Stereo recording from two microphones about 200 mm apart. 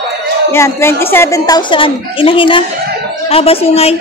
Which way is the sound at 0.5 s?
10° left (ahead or behind).